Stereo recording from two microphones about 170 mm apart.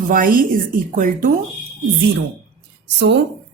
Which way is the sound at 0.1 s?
55° right (ahead or behind).